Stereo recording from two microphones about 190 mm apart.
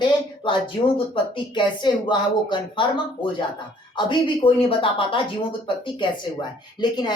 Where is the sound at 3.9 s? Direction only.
25° left (ahead or behind).